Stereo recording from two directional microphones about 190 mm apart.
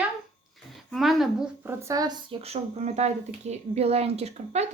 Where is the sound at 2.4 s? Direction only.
35° right (ahead or behind).